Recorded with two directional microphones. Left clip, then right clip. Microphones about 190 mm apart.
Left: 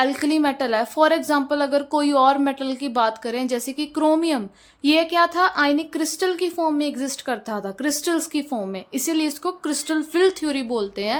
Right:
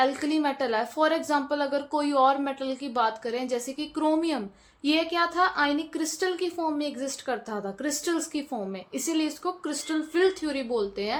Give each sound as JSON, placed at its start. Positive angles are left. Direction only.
{"t": 0.0, "sound": "a woman's voice", "side_deg": 35}